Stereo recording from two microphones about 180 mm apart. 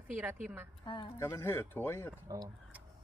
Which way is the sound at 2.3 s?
20° right (ahead or behind).